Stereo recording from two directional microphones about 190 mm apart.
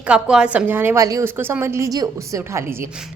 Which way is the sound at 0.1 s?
5° right (ahead or behind).